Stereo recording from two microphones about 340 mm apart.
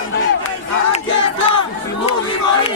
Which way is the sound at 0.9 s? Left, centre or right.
Centre.